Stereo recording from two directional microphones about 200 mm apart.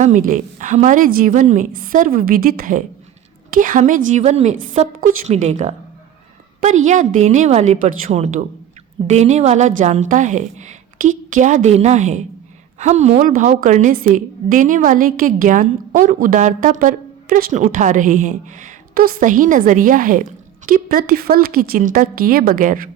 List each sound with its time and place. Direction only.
0.0 s a woman's voice: 40° right (ahead or behind)